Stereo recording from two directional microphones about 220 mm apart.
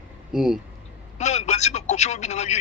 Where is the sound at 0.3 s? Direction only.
Centre (ahead or behind).